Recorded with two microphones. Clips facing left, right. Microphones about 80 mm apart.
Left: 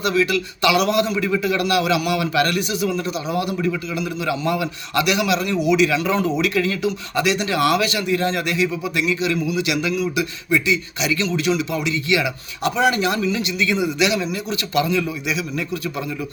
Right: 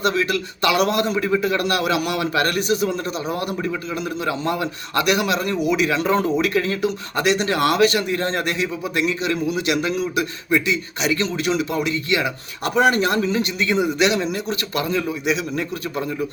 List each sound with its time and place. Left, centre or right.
0.0 s a man's voice: right